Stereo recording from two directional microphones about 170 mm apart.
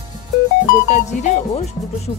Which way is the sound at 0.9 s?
45° left (ahead or behind).